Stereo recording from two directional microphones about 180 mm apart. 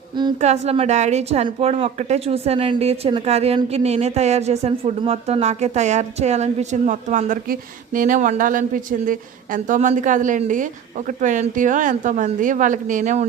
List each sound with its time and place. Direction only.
0.4 s a woman's voice: 35° right (ahead or behind)